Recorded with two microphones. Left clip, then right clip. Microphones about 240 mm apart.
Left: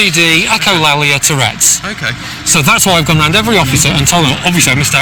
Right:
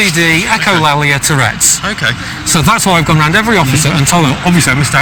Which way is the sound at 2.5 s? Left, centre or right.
Centre.